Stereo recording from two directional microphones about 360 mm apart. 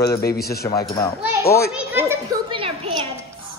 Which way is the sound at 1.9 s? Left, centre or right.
Centre.